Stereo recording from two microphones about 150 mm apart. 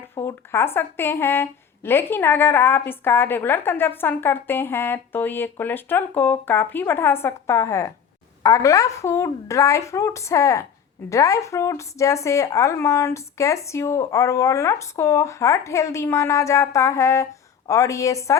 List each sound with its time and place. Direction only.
0.1 s speech: 15° left (ahead or behind)